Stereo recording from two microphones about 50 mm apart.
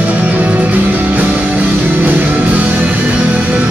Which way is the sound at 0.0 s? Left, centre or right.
Right.